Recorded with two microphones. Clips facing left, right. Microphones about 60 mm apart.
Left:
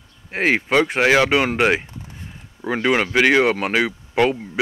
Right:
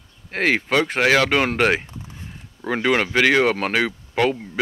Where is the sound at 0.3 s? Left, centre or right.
Centre.